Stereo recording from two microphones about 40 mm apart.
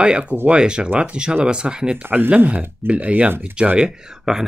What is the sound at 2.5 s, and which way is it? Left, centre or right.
Speech, right.